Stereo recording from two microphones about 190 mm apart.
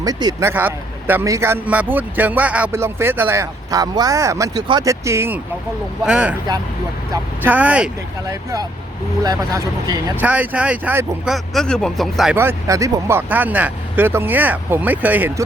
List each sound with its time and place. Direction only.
0.0 s speech: 20° right (ahead or behind)
9.2 s speech: 20° right (ahead or behind)
11.5 s speech: 5° left (ahead or behind)